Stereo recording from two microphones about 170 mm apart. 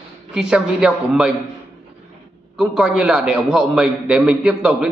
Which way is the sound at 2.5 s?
5° right (ahead or behind).